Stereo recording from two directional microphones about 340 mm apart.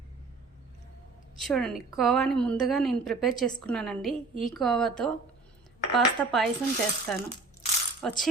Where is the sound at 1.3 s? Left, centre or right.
Centre.